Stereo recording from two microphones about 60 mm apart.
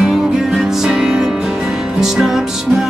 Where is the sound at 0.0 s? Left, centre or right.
Centre.